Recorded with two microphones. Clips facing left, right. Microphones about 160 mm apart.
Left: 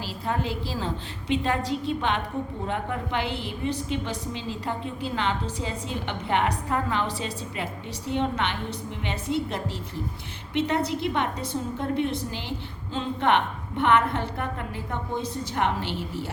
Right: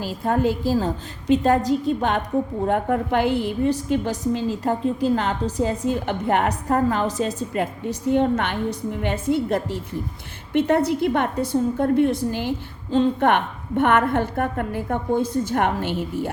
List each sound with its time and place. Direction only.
0.0 s a woman's voice: 50° right (ahead or behind)